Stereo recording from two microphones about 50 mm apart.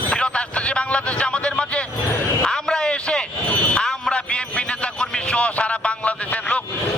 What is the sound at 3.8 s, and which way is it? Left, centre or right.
Music, centre.